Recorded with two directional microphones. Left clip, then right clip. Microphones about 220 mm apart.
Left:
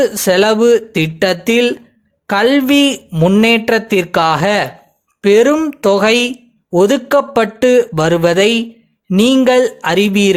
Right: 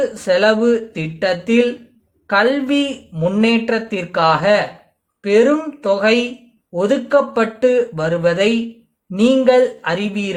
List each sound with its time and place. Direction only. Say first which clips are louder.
0.0 s speech: left 3 dB; 40° left (ahead or behind)